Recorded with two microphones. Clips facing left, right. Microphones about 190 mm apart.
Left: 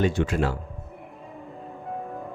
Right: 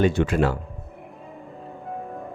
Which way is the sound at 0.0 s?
60° right (ahead or behind).